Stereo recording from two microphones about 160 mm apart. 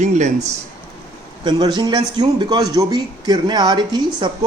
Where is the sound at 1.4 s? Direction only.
25° right (ahead or behind).